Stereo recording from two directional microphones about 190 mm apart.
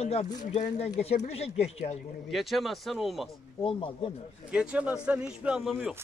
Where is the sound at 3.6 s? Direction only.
25° left (ahead or behind).